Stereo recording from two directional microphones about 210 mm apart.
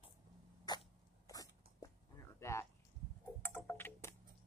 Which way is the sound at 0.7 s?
20° left (ahead or behind).